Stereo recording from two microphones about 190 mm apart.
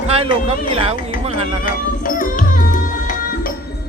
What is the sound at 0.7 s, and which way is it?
Speech, 30° right (ahead or behind).